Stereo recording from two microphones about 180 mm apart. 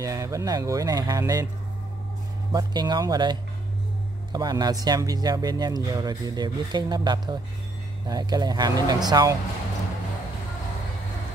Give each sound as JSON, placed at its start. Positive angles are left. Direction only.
{"t": 0.0, "sound": "speech", "side_deg": -20}
{"t": 2.5, "sound": "speech", "side_deg": -25}